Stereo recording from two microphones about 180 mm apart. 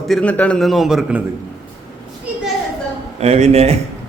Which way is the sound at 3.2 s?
40° right (ahead or behind).